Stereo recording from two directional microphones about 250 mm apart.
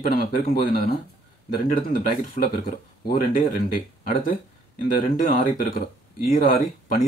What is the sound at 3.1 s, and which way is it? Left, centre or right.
Speech, left.